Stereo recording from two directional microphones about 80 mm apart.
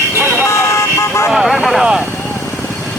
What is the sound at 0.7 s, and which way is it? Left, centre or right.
Vehicle, left.